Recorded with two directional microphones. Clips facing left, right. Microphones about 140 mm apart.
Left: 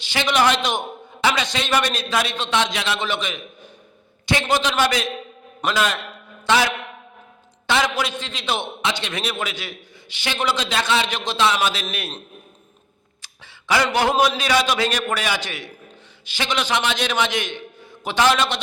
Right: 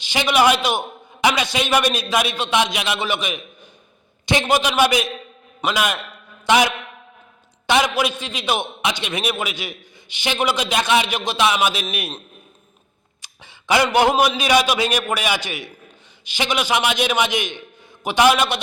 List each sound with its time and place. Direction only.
0.0 s a man's voice: 15° right (ahead or behind)
6.4 s a sound: 15° right (ahead or behind)
7.7 s a man's voice: 15° right (ahead or behind)
13.2 s a man's voice: 20° right (ahead or behind)